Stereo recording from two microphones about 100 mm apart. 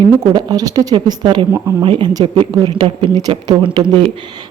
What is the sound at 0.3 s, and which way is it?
Speech, 40° right (ahead or behind).